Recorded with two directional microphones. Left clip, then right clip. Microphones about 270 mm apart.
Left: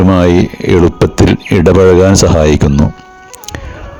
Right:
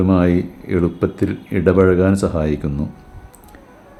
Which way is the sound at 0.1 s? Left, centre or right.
Left.